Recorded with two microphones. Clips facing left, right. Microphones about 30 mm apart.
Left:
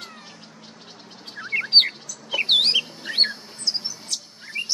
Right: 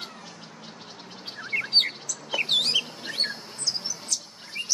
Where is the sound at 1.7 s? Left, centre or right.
Left.